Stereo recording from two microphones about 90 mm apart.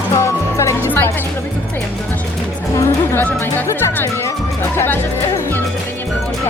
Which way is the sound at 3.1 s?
20° left (ahead or behind).